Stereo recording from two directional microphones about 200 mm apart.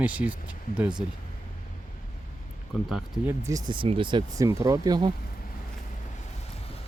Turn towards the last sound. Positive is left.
turn(degrees=-20)  # may be behind; listen again after turning